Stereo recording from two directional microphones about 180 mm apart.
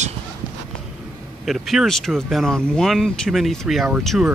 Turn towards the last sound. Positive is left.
turn(degrees=0)  # may be behind; listen again after turning